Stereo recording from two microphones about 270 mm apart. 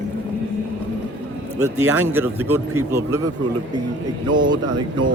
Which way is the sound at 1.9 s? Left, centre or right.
Centre.